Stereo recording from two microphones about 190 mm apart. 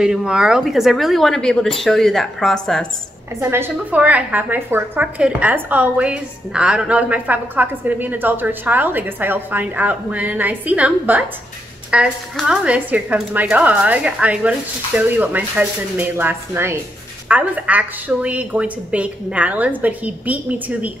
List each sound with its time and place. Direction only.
0.0 s speech: 5° right (ahead or behind)
3.3 s a woman's voice: 15° right (ahead or behind)